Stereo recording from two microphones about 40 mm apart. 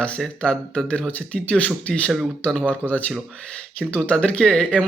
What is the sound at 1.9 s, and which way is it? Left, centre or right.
Speech, left.